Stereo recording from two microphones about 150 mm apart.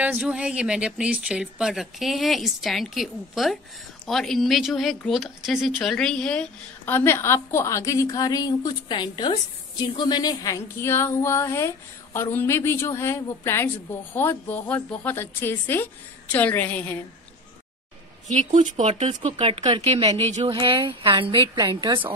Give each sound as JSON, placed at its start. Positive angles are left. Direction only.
{"t": 0.0, "sound": "a woman's voice", "side_deg": -5}
{"t": 18.3, "sound": "speech", "side_deg": -50}
{"t": 20.5, "sound": "a woman's voice", "side_deg": -35}